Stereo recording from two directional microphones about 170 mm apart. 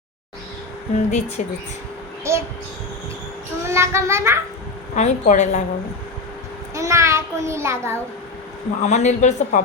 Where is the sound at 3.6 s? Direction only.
15° right (ahead or behind).